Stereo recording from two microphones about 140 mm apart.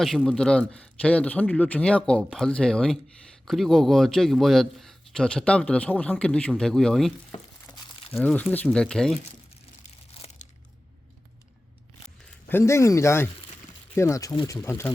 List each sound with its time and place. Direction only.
0.0 s a man's voice: centre (ahead or behind)
8.2 s a man's voice: 10° left (ahead or behind)
10.1 s crumpling: 40° left (ahead or behind)
12.5 s speech: 20° left (ahead or behind)